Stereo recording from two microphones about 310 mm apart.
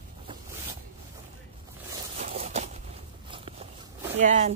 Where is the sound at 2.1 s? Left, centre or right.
Right.